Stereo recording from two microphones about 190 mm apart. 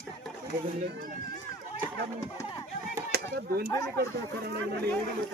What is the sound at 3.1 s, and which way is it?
Chop, 55° right (ahead or behind).